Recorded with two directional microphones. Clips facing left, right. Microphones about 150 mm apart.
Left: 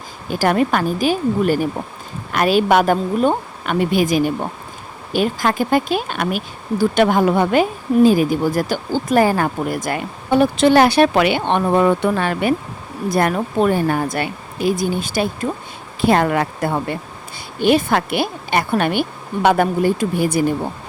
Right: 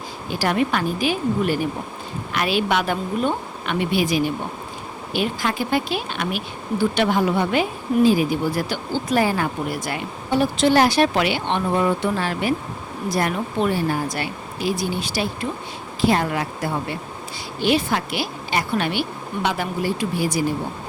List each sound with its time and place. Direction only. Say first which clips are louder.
0.3 s speech: left 5 dB; 45° left (ahead or behind)
16.0 s speech: left 5 dB; 60° left (ahead or behind)